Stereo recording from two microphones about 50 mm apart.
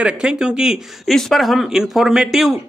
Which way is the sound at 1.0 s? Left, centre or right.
Centre.